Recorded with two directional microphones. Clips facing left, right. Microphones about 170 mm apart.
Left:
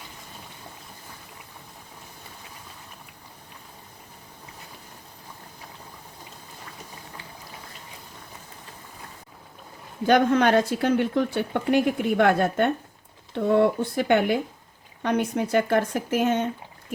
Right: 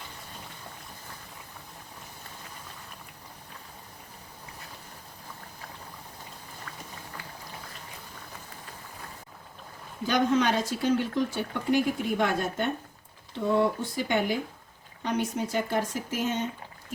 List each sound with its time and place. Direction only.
10.1 s speech: 60° left (ahead or behind)